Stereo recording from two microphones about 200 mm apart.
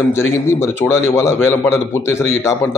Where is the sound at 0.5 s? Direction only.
10° left (ahead or behind).